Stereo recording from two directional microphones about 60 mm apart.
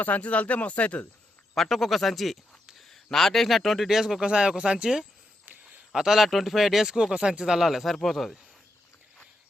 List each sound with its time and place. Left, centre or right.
0.0 s speech: left
1.5 s speech: centre
5.5 s a sound: right
5.9 s speech: centre